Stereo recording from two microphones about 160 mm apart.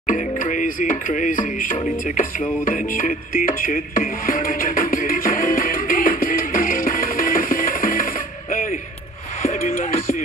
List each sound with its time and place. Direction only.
0.0 s music: 55° left (ahead or behind)